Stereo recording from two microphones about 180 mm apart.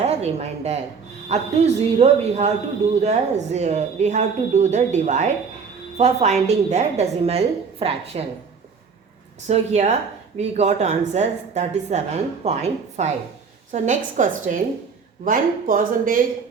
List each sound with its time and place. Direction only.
0.0 s a man's voice: 35° right (ahead or behind)
9.5 s a man's voice: 40° right (ahead or behind)